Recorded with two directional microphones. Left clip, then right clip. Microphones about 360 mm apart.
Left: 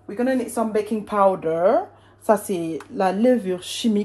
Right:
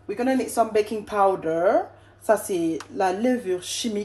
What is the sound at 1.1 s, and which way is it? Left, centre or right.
Speech, centre.